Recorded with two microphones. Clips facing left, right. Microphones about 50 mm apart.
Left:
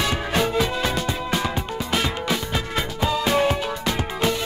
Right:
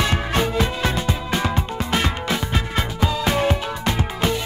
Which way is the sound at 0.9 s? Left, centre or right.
Right.